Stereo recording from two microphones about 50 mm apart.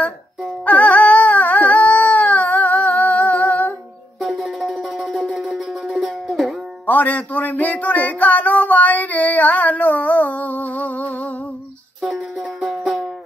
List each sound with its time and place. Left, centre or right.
0.7 s music: left
4.3 s music: centre
6.9 s a sound: left
12.1 s music: centre